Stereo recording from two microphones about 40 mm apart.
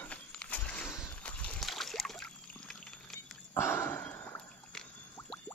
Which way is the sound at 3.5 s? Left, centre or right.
Left.